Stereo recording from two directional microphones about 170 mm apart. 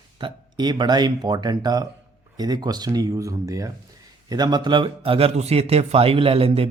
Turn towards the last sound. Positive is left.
turn(degrees=-35)  # may be behind; listen again after turning